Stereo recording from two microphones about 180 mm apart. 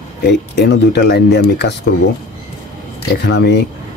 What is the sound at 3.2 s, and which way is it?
Speech, 70° left (ahead or behind).